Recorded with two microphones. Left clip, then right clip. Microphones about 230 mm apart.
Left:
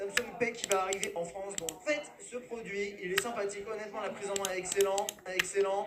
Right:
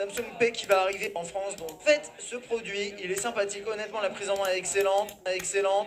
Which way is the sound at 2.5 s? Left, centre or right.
Right.